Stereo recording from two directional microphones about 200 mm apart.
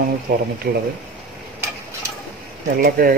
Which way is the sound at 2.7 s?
45° right (ahead or behind).